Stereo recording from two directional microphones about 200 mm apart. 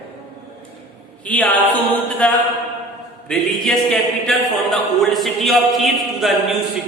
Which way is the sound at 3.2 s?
5° left (ahead or behind).